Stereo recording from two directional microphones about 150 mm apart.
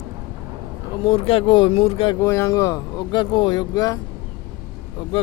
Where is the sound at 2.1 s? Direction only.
20° left (ahead or behind).